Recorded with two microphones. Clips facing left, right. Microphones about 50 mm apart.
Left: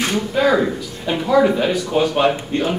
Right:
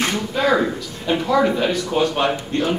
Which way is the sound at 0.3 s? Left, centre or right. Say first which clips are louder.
Left 2 dB; centre.